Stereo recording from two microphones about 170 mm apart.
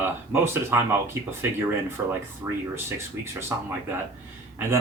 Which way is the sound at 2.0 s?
15° right (ahead or behind).